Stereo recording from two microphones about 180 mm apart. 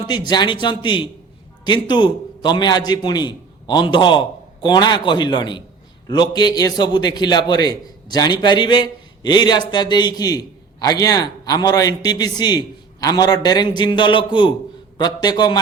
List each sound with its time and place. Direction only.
0.3 s a man's voice: 25° left (ahead or behind)